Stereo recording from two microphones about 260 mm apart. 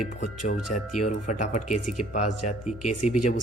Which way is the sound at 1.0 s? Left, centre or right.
Left.